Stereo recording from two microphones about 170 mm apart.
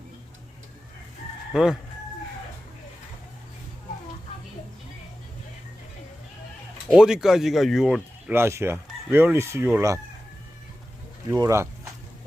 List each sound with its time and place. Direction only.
1.5 s speech: 5° right (ahead or behind)
6.9 s speech: 5° right (ahead or behind)
11.3 s speech: 20° right (ahead or behind)